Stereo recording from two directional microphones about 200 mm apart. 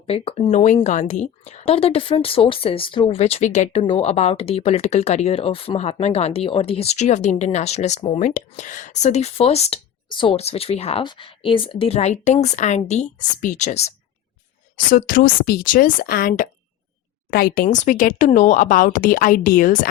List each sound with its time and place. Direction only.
0.0 s speech: 30° left (ahead or behind)